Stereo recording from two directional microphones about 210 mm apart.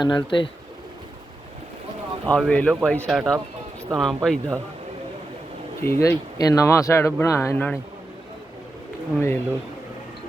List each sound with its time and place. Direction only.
0.0 s speech: 20° left (ahead or behind)
2.2 s speech: 5° left (ahead or behind)
5.8 s speech: 10° left (ahead or behind)
9.1 s speech: 10° left (ahead or behind)